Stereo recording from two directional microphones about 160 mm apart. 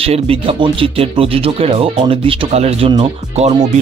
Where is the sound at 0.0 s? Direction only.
35° right (ahead or behind).